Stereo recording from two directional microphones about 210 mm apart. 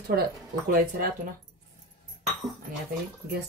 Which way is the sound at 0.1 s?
45° right (ahead or behind).